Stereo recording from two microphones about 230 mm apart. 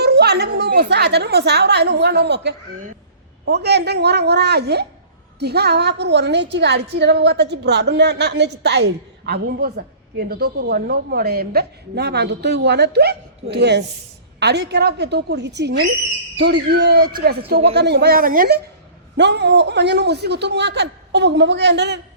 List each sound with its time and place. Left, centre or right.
0.0 s a woman's voice: right